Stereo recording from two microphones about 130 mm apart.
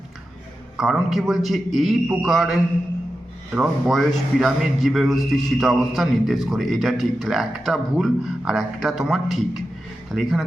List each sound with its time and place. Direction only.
0.8 s a man's voice: centre (ahead or behind)